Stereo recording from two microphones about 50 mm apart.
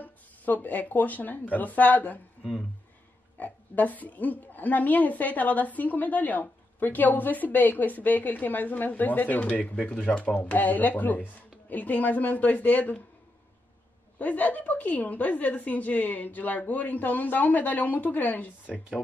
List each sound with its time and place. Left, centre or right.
0.0 s speech: left
3.3 s a woman's voice: left
14.1 s a woman's voice: left